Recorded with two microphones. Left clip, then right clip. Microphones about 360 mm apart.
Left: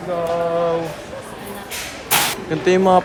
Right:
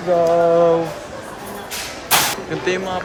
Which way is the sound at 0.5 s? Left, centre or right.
Centre.